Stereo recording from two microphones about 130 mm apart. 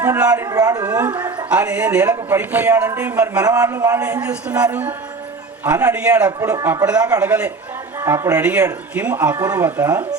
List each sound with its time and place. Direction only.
0.0 s a man's voice: 15° right (ahead or behind)
0.3 s a man's voice: 25° right (ahead or behind)
1.5 s speech: 10° right (ahead or behind)
3.4 s a man's voice: 25° right (ahead or behind)